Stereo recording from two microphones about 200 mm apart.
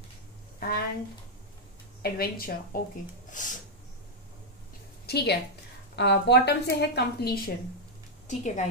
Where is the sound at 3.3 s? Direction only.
40° left (ahead or behind).